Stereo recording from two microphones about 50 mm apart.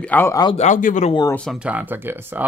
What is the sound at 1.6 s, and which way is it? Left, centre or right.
Speech, right.